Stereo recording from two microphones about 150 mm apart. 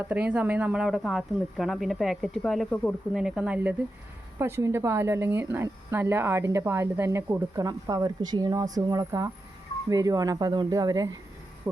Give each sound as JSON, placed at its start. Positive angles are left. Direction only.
{"t": 0.1, "sound": "speech", "side_deg": -10}
{"t": 11.6, "sound": "hoot", "side_deg": -15}